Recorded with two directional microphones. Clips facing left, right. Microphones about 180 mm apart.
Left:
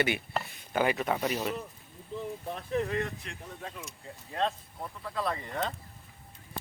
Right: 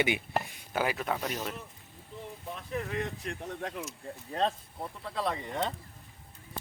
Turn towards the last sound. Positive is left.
turn(degrees=-20)  # may be behind; listen again after turning